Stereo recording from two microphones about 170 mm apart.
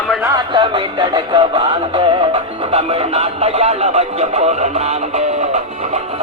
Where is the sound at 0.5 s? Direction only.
30° right (ahead or behind).